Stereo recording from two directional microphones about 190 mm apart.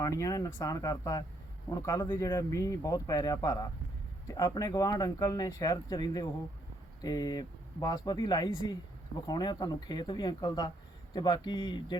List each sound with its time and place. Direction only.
0.0 s speech: 20° left (ahead or behind)